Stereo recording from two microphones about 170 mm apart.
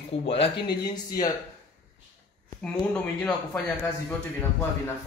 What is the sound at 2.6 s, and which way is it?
Speech, 5° left (ahead or behind).